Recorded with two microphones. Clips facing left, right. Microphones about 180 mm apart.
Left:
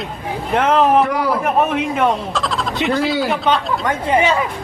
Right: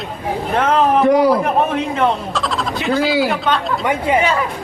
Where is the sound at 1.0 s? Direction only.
20° right (ahead or behind).